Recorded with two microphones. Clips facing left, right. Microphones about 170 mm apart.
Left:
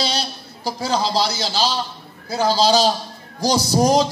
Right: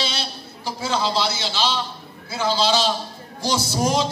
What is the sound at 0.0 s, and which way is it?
A man's voice, 40° left (ahead or behind).